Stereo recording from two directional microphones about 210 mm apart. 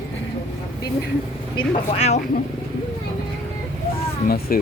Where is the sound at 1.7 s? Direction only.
30° left (ahead or behind).